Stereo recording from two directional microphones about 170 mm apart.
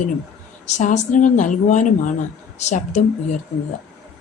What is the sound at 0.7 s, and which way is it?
Speech, 45° left (ahead or behind).